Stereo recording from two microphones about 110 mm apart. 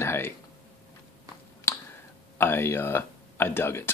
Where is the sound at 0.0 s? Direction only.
25° left (ahead or behind).